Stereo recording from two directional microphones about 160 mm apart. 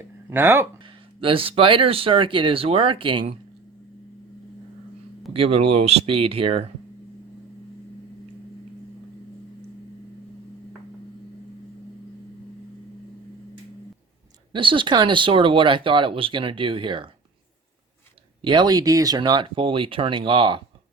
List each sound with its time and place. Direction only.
0.3 s speech: 15° right (ahead or behind)
0.8 s speech: 30° right (ahead or behind)
5.3 s speech: 35° right (ahead or behind)
14.5 s speech: 30° right (ahead or behind)
18.4 s speech: 25° right (ahead or behind)